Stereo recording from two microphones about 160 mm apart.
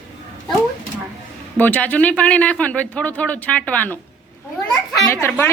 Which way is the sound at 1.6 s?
10° left (ahead or behind).